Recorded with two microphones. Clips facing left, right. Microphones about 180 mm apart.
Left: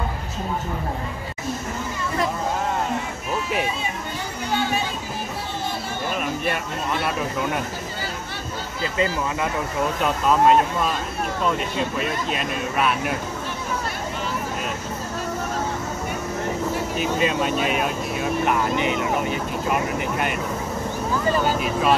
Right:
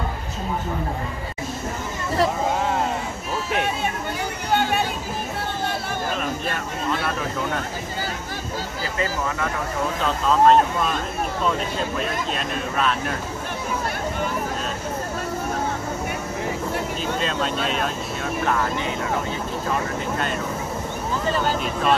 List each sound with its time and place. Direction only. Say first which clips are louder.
8.9 s speech: left 2 dB; 20° left (ahead or behind)
12.0 s speech: left 1 dB; 5° left (ahead or behind)
17.0 s speech: left 5 dB; 10° left (ahead or behind)
21.5 s speech: left 1 dB; 5° left (ahead or behind)